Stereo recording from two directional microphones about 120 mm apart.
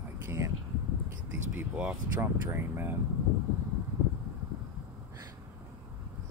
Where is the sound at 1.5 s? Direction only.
10° right (ahead or behind).